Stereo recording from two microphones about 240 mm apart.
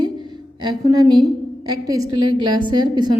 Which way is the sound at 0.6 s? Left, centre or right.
Centre.